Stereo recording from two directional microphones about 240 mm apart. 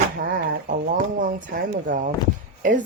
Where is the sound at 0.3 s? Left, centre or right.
Right.